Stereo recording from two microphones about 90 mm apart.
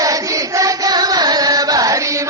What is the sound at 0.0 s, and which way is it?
Chant, 40° right (ahead or behind).